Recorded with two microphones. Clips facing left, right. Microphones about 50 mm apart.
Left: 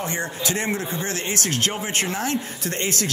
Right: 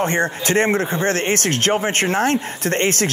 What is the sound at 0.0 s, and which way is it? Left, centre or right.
Speech, right.